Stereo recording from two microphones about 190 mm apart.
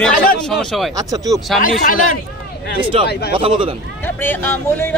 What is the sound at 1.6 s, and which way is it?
Speech, 45° left (ahead or behind).